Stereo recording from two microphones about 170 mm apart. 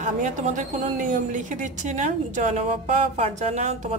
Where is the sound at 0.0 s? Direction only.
45° right (ahead or behind).